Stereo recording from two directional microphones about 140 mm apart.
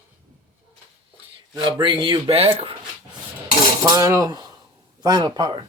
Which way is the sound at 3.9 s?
25° right (ahead or behind).